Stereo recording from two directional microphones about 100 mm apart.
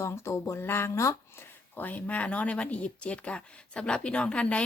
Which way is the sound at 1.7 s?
15° left (ahead or behind).